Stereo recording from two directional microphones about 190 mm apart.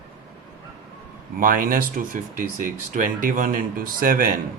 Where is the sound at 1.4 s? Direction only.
45° right (ahead or behind).